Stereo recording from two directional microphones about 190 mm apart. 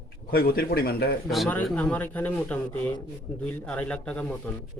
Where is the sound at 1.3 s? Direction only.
5° left (ahead or behind).